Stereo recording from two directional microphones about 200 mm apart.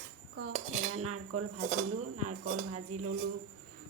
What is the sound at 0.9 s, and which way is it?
Speech, 90° right.